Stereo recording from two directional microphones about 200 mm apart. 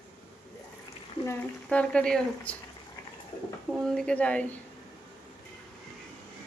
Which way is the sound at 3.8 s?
5° left (ahead or behind).